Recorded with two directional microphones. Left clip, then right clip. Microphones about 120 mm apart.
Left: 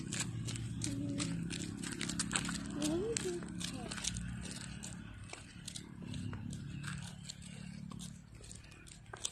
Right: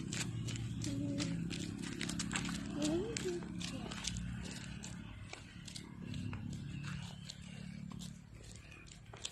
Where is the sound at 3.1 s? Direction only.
40° left (ahead or behind).